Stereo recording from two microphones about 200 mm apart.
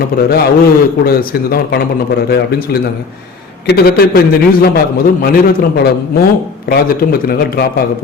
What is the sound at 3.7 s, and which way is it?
A man's voice, 50° left (ahead or behind).